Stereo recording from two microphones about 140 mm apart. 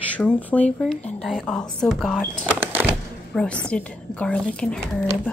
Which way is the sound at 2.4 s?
10° right (ahead or behind).